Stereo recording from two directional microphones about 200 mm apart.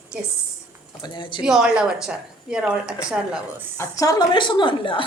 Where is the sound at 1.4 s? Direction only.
5° right (ahead or behind).